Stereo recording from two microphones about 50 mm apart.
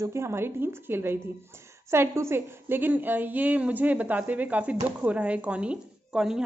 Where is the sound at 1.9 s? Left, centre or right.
Right.